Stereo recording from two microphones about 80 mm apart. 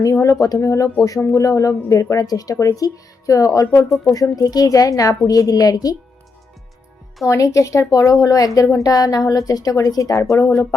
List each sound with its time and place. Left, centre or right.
0.0 s speech: left
7.3 s speech: left